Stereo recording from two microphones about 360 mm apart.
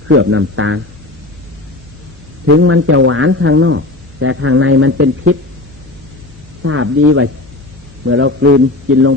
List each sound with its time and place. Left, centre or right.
0.1 s a man's voice: right
2.5 s a man's voice: right
6.6 s a man's voice: right